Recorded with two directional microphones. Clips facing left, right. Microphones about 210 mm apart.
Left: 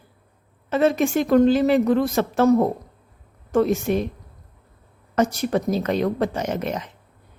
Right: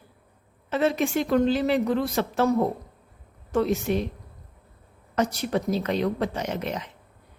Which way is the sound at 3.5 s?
50° left (ahead or behind).